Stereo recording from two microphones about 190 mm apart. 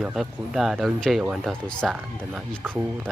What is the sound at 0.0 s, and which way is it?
Speech, centre (ahead or behind).